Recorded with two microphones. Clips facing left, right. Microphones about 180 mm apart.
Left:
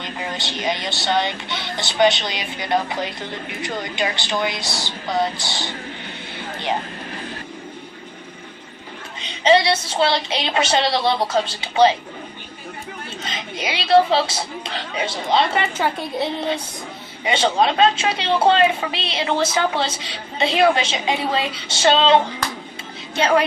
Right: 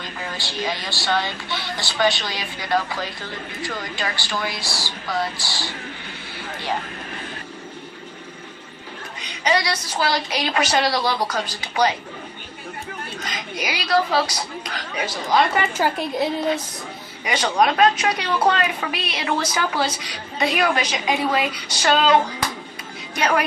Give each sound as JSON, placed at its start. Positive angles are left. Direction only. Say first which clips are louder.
{"t": 0.0, "sound": "speech", "louder": "left 3 dB", "side_deg": 20}
{"t": 9.2, "sound": "speech", "louder": "left 6 dB", "side_deg": 25}
{"t": 13.2, "sound": "speech", "louder": "left 2 dB", "side_deg": 25}
{"t": 17.2, "sound": "speech", "louder": "left 1 dB", "side_deg": 25}